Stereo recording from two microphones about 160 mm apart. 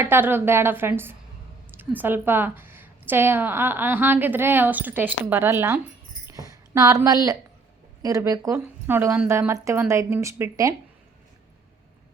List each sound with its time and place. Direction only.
0.0 s a woman's voice: 15° right (ahead or behind)